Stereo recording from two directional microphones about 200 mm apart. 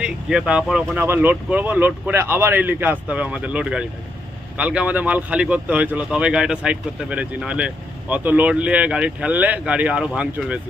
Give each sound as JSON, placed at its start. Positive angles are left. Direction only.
{"t": 0.0, "sound": "speech", "side_deg": -5}